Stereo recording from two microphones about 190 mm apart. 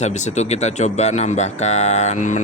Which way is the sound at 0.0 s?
40° left (ahead or behind).